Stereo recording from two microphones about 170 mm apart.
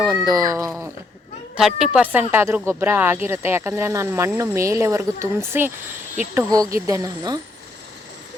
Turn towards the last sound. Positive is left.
turn(degrees=-20)  # may be behind; listen again after turning